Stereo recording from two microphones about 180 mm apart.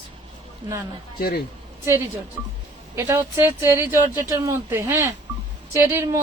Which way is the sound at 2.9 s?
15° right (ahead or behind).